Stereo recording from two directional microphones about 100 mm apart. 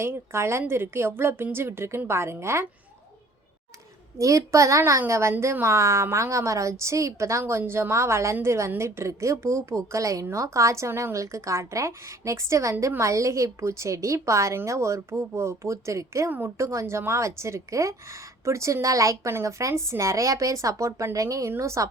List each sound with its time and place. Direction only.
0.0 s a woman's voice: 25° right (ahead or behind)
4.2 s a woman's voice: 35° right (ahead or behind)